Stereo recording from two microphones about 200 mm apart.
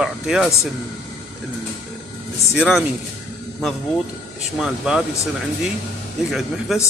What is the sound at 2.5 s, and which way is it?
Speech, 5° left (ahead or behind).